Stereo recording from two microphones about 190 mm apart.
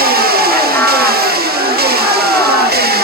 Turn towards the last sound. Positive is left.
turn(degrees=-55)  # may be behind; listen again after turning